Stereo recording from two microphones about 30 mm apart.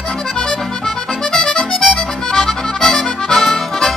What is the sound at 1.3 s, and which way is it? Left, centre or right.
Accordion, centre.